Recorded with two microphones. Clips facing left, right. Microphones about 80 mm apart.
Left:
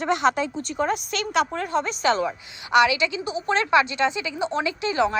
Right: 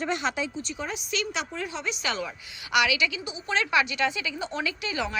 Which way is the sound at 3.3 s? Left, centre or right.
Left.